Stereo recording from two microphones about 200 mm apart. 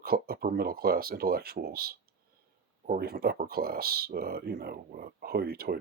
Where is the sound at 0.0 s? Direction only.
50° right (ahead or behind).